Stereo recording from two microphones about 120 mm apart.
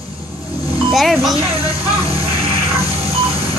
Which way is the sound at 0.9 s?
Centre (ahead or behind).